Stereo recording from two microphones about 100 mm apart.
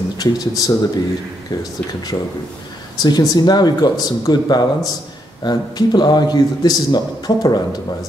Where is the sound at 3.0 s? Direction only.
45° left (ahead or behind).